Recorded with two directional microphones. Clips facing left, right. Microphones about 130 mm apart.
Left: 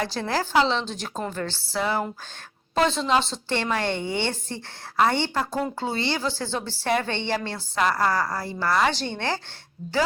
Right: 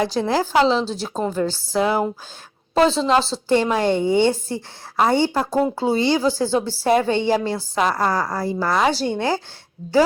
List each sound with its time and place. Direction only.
0.0 s a woman's voice: 20° right (ahead or behind)
0.8 s a woman's voice: 35° right (ahead or behind)
1.3 s a woman's voice: 10° right (ahead or behind)
2.7 s a woman's voice: 35° right (ahead or behind)
3.5 s a woman's voice: 15° right (ahead or behind)